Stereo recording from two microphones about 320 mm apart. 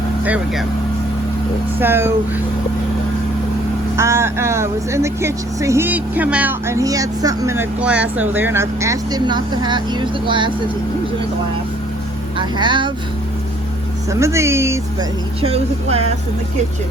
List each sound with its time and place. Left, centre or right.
1.8 s speech: centre
3.9 s speech: centre
12.5 s speech: centre
14.1 s speech: centre